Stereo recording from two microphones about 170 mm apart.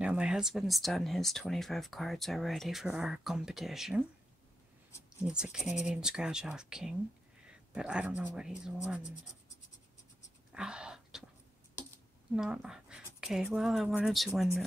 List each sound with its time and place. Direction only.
0.0 s speech: 5° right (ahead or behind)
5.2 s speech: 5° right (ahead or behind)
10.5 s a sound: 5° right (ahead or behind)
12.4 s speech: 5° right (ahead or behind)